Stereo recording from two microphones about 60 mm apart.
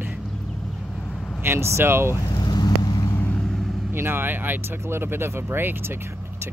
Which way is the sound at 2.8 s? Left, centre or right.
Left.